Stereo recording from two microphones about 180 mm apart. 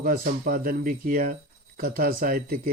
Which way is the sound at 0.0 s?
55° right (ahead or behind).